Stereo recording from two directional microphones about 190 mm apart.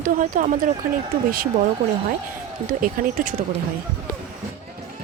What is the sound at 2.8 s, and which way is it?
Speech, 45° right (ahead or behind).